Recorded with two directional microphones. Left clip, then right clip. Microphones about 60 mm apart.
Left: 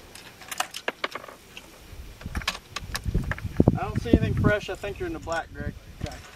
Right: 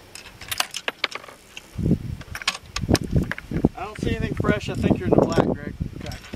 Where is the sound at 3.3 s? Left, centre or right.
Right.